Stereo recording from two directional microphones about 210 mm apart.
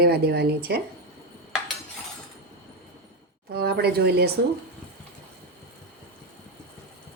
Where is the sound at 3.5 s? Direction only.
50° right (ahead or behind).